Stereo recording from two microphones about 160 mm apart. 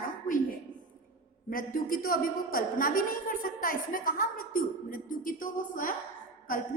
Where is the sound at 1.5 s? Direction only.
60° left (ahead or behind).